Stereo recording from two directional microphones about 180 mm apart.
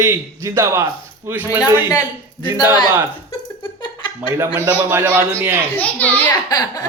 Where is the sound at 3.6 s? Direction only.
25° left (ahead or behind).